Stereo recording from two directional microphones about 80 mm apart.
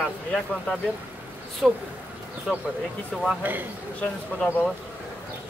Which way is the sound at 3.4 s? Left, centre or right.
Right.